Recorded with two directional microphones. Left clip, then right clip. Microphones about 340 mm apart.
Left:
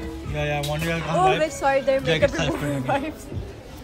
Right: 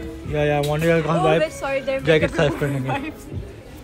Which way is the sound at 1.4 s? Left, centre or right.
Left.